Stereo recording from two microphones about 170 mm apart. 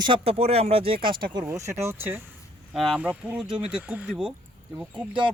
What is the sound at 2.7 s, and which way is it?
Speech, centre (ahead or behind).